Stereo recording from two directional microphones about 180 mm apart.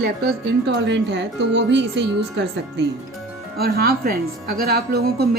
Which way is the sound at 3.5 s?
60° right (ahead or behind).